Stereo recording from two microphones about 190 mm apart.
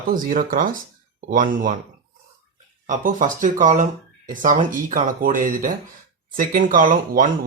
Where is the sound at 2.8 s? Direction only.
40° right (ahead or behind).